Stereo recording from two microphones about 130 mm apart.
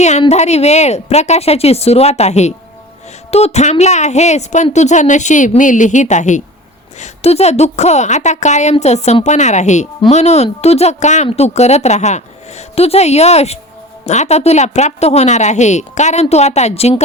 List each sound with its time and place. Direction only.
0.0 s speech: 60° left (ahead or behind)
7.0 s speech: 55° left (ahead or behind)